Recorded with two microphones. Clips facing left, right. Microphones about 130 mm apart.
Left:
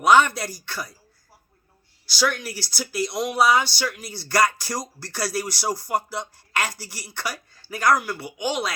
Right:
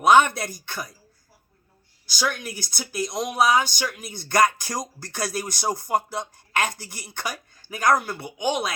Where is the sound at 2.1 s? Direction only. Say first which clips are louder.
Left 3 dB; 15° right (ahead or behind).